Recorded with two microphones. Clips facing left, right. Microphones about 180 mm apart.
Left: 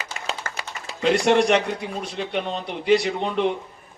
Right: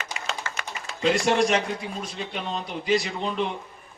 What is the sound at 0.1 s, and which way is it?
Clapping, 45° left (ahead or behind).